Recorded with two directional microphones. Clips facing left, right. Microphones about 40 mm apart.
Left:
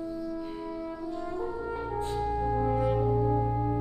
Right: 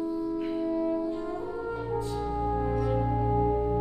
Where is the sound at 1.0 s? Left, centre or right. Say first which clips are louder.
Right 3 dB; right.